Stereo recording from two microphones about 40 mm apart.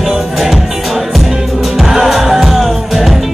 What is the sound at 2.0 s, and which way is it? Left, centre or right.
Music, centre.